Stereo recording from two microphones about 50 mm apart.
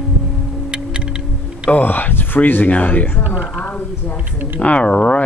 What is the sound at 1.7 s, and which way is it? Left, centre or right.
Speech, left.